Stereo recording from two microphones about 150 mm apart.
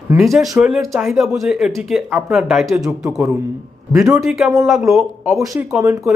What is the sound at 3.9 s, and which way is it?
Speech, 20° right (ahead or behind).